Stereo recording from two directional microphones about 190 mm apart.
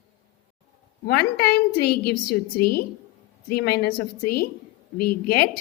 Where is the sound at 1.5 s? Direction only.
55° left (ahead or behind).